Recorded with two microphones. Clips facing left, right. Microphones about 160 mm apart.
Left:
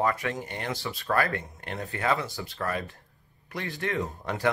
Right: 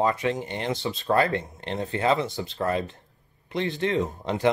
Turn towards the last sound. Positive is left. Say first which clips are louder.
# right 4 dB
turn(degrees=-20)  # may be behind; listen again after turning